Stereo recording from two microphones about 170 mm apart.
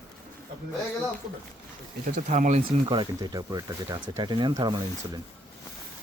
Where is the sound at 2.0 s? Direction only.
50° right (ahead or behind).